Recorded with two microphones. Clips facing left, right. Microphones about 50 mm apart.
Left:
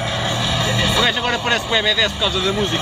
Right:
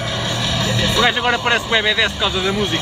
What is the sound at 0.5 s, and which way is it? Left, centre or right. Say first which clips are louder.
Vehicle: even; left.